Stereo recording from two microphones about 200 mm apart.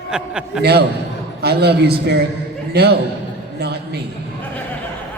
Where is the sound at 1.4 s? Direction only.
55° right (ahead or behind).